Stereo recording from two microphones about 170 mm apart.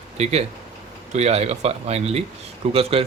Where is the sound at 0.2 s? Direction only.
40° right (ahead or behind).